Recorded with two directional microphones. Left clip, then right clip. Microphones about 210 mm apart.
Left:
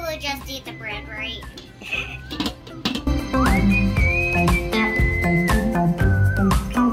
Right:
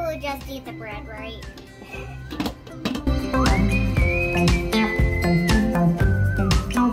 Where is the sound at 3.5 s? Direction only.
Centre (ahead or behind).